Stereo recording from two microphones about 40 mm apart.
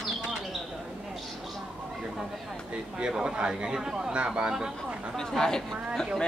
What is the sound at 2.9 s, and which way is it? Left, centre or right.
Speech, centre.